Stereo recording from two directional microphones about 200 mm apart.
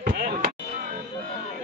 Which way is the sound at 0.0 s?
50° right (ahead or behind).